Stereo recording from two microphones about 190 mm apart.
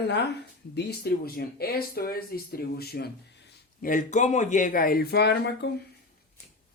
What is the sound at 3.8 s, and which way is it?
Speech, 45° left (ahead or behind).